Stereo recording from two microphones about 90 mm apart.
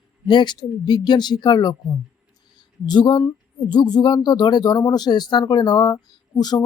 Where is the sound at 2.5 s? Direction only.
55° left (ahead or behind).